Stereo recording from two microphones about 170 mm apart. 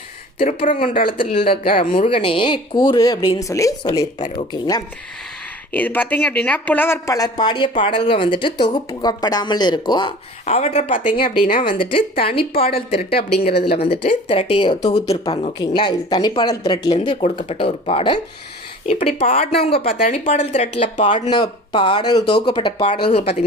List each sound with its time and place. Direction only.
0.4 s speech: 55° left (ahead or behind)
1.1 s a woman's voice: 30° left (ahead or behind)
1.6 s speech: 55° left (ahead or behind)
2.0 s a woman's voice: 30° left (ahead or behind)
5.7 s a woman's voice: 10° left (ahead or behind); by 10.2 s 25° left (ahead or behind)
10.4 s speech: 40° left (ahead or behind)
11.4 s speech: 55° left (ahead or behind)
11.9 s speech: 30° left (ahead or behind)
13.0 s speech: 65° left (ahead or behind)
14.0 s a woman's voice: 35° left (ahead or behind)